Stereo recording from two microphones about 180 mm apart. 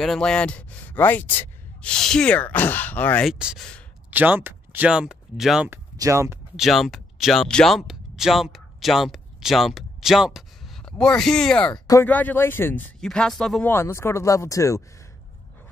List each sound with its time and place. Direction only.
0.0 s speech: centre (ahead or behind)
3.3 s speech: 5° right (ahead or behind)
5.9 s speech: 15° right (ahead or behind)
6.5 s speech: centre (ahead or behind)
11.7 s speech: 20° left (ahead or behind)
12.1 s speech: 10° left (ahead or behind)